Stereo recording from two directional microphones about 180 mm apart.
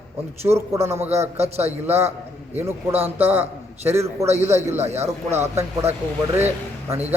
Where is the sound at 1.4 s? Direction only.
35° right (ahead or behind).